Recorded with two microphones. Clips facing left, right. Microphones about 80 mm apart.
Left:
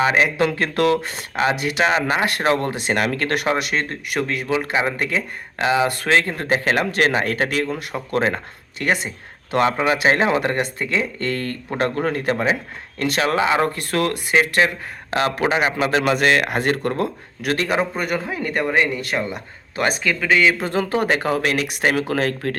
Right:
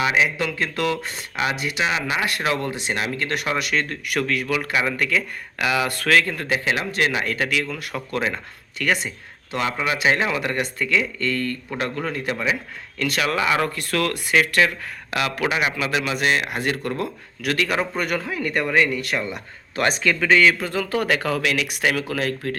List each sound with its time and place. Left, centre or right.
0.0 s speech: left
2.8 s speech: left
3.4 s speech: left
17.7 s speech: centre
20.6 s speech: left